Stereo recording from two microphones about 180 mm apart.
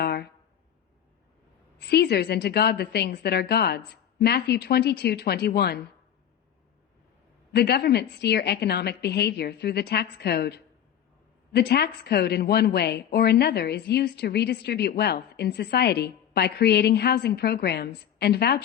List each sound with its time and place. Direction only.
0.0 s a sound: 65° left (ahead or behind)
1.8 s a woman's voice: 65° left (ahead or behind)
7.5 s a woman's voice: 65° left (ahead or behind)